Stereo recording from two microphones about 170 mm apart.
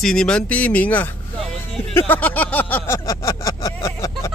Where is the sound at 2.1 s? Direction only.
10° left (ahead or behind).